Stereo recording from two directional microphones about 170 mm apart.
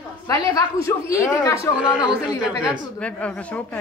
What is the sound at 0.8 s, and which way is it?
Speech, 15° left (ahead or behind).